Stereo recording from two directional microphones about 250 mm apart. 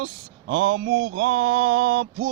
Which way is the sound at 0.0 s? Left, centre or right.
Right.